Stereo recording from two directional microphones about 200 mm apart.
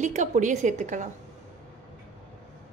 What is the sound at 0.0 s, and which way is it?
A woman's voice, 35° right (ahead or behind).